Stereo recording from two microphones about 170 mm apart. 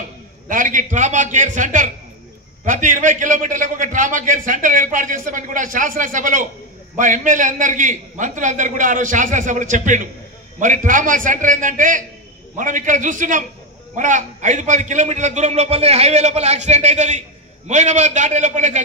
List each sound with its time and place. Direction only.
0.5 s a man's voice: 50° right (ahead or behind)